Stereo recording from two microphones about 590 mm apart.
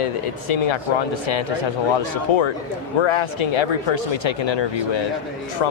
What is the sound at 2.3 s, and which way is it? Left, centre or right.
Speech, left.